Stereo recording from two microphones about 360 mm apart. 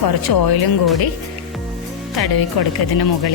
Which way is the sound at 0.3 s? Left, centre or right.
Left.